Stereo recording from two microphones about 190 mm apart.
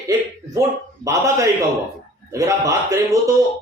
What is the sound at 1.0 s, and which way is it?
Speech, 15° right (ahead or behind).